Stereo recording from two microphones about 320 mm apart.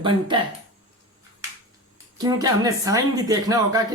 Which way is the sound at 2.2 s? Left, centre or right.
Centre.